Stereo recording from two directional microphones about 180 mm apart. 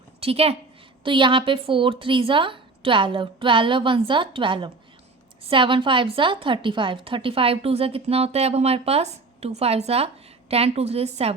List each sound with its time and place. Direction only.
0.2 s a woman's voice: 35° right (ahead or behind)